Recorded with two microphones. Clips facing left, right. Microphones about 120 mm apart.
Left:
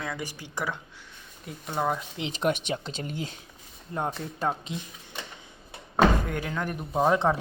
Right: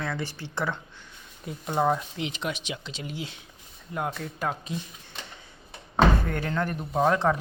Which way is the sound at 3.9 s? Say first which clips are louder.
Even; 30° left (ahead or behind).